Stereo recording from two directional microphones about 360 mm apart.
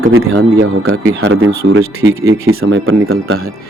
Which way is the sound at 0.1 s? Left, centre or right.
Right.